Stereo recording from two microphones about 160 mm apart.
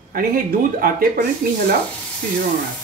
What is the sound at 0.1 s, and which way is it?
Speech, 65° right (ahead or behind).